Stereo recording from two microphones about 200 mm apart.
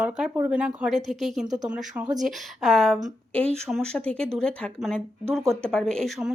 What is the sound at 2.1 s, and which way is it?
Speech, centre (ahead or behind).